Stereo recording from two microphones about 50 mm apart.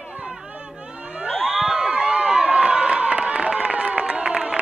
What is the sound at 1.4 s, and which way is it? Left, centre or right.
Crowd, centre.